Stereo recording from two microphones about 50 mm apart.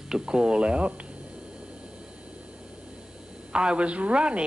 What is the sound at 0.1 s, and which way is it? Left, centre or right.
Speech, centre.